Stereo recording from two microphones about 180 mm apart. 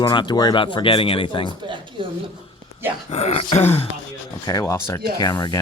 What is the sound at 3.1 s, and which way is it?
Gasp, 35° left (ahead or behind).